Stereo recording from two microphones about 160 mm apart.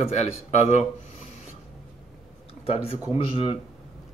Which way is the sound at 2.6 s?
35° left (ahead or behind).